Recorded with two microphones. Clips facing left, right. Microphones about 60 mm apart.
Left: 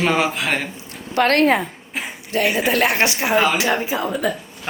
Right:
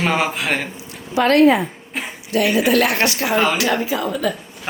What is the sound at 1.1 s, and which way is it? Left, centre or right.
Speech, left.